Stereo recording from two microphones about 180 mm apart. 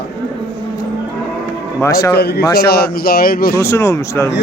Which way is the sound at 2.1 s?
65° left (ahead or behind).